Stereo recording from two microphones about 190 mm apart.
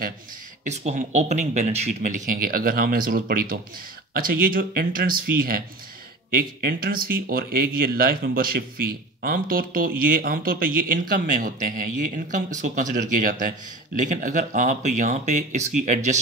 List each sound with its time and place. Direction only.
0.7 s speech: 35° right (ahead or behind)